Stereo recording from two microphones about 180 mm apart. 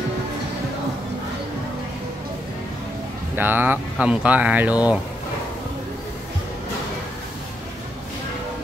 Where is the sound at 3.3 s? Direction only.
10° right (ahead or behind).